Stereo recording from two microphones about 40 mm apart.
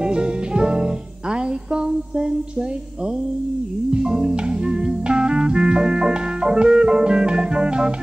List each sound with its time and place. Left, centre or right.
0.0 s music: right
3.9 s music: centre